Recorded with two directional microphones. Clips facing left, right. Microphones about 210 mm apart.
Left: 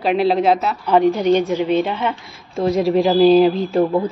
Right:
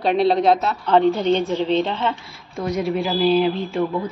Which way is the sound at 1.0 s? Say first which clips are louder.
Left 3 dB; 15° left (ahead or behind).